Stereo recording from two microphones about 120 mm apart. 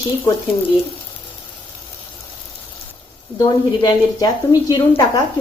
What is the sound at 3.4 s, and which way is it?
Speech, 35° left (ahead or behind).